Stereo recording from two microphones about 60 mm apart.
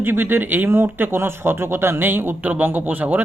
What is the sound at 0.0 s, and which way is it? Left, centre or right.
Speech, right.